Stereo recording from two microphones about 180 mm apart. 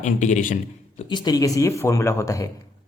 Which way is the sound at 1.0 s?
25° left (ahead or behind).